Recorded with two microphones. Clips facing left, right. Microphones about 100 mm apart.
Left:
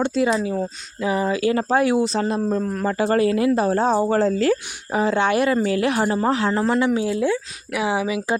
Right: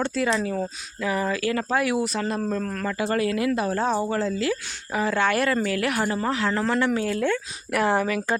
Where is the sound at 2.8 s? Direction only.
35° left (ahead or behind).